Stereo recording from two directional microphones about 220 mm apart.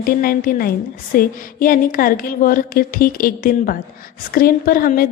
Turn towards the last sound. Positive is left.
turn(degrees=40)  # may be behind; listen again after turning